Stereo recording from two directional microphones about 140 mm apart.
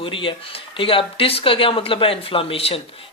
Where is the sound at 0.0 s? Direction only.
40° left (ahead or behind).